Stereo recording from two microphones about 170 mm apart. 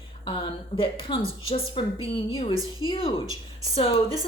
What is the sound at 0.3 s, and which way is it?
Speech, 30° left (ahead or behind).